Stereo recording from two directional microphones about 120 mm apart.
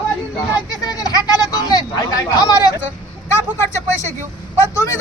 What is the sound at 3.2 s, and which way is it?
Vehicle, 20° left (ahead or behind).